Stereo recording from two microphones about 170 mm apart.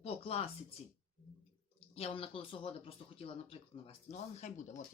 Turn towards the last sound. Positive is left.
turn(degrees=40)  # may be behind; listen again after turning